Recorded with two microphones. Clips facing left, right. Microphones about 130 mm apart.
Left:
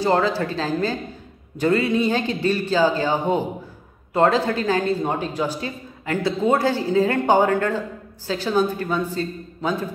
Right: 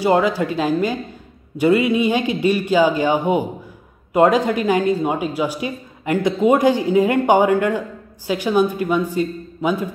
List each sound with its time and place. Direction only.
0.0 s a woman's voice: 15° right (ahead or behind)